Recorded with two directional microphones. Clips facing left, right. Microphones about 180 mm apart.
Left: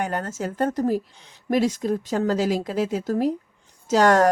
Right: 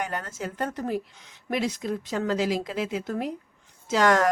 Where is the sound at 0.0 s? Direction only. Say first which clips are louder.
Left 5 dB; 50° left (ahead or behind).